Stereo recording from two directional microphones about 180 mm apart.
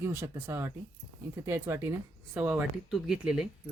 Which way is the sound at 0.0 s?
10° right (ahead or behind).